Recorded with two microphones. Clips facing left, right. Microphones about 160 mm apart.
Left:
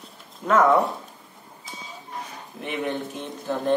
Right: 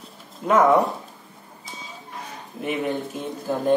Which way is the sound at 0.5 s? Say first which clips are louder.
Right 1 dB; 10° right (ahead or behind).